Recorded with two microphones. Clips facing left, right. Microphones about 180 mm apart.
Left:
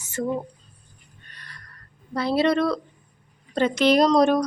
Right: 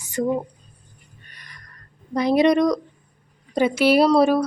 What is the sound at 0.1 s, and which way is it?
Speech, 15° right (ahead or behind).